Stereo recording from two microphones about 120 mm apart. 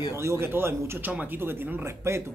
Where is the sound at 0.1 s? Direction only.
25° right (ahead or behind).